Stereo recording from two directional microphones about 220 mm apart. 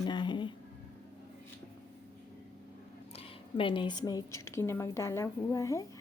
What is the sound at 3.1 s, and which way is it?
Speech, 25° left (ahead or behind).